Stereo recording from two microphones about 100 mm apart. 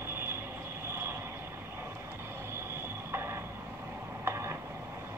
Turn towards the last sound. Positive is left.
turn(degrees=-25)  # may be behind; listen again after turning